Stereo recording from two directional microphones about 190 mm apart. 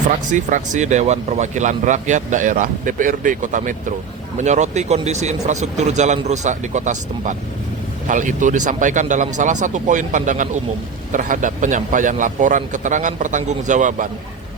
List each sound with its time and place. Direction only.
0.1 s speech: 40° right (ahead or behind)